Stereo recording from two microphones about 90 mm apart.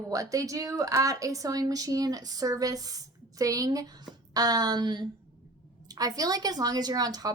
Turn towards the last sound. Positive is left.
turn(degrees=-45)  # may be behind; listen again after turning